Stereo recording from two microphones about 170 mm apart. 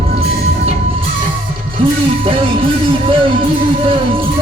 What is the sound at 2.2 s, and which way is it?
Music, 30° right (ahead or behind).